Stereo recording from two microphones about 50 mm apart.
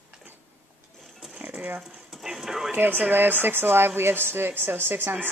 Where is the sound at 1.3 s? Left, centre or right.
Right.